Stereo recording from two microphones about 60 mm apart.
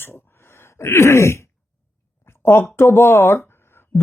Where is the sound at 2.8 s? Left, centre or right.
Left.